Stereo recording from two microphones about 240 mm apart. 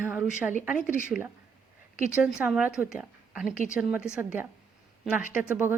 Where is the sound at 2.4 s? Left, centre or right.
Centre.